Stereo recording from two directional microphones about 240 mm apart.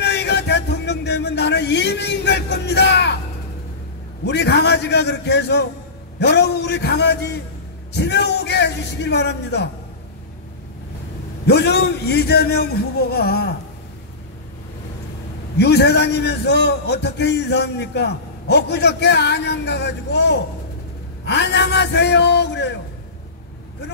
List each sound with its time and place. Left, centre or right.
0.0 s a sound: left
4.2 s a man's voice: left
11.4 s a man's voice: left
15.5 s a man's voice: left